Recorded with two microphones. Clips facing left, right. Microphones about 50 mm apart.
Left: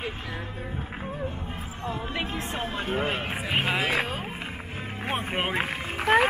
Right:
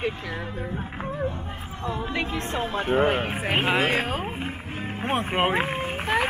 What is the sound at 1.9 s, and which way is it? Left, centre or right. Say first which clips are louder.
Speech: right 3 dB; right.